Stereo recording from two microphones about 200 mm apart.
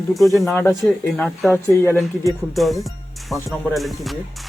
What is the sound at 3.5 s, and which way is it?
Music, centre (ahead or behind).